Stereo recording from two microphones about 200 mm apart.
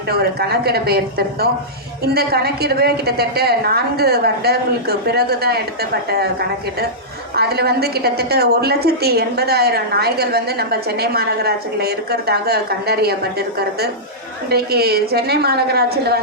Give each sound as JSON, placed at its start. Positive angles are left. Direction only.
{"t": 0.1, "sound": "a woman's voice", "side_deg": -50}
{"t": 7.3, "sound": "a woman's voice", "side_deg": -50}
{"t": 14.5, "sound": "a woman's voice", "side_deg": -50}